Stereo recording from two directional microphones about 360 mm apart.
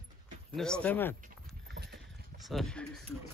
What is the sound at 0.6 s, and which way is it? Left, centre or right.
Speech, centre.